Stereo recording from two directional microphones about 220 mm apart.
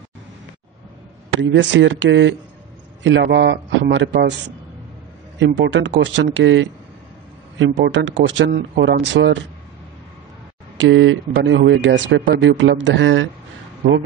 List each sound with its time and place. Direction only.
1.4 s a man's voice: 55° right (ahead or behind)
5.4 s a man's voice: 55° right (ahead or behind)
10.8 s speech: 60° right (ahead or behind)